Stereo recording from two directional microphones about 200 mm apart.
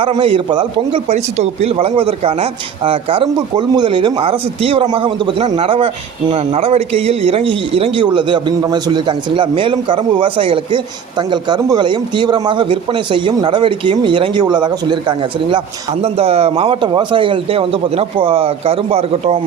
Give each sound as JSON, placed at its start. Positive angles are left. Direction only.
{"t": 0.0, "sound": "a man's voice", "side_deg": -25}